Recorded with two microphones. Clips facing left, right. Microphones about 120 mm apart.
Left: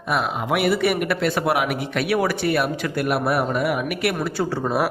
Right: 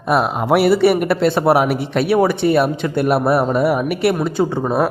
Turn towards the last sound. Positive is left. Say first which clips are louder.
# right 5 dB
turn(degrees=-25)  # may be behind; listen again after turning